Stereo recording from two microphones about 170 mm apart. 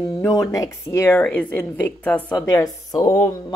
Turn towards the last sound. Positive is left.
turn(degrees=20)  # may be behind; listen again after turning